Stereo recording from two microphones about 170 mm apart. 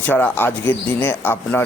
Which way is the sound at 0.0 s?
10° left (ahead or behind).